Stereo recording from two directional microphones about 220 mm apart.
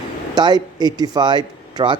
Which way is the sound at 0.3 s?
20° right (ahead or behind).